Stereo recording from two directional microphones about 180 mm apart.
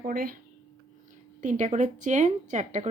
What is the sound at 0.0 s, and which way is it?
Speech, 50° right (ahead or behind).